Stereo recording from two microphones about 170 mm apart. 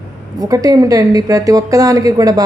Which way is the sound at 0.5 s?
20° right (ahead or behind).